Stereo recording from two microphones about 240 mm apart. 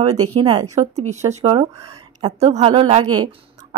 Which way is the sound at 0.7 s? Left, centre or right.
Right.